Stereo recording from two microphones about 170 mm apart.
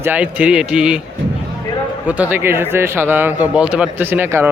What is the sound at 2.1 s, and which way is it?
Speech, 10° right (ahead or behind).